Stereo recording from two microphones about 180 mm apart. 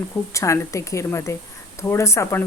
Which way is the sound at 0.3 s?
15° left (ahead or behind).